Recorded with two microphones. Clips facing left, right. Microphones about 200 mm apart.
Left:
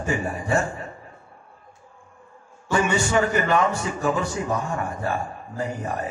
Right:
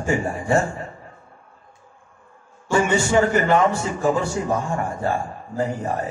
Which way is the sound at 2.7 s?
25° right (ahead or behind).